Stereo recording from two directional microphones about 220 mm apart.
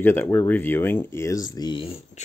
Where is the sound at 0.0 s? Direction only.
10° left (ahead or behind).